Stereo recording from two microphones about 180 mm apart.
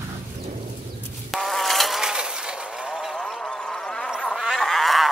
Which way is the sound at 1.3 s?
Centre (ahead or behind).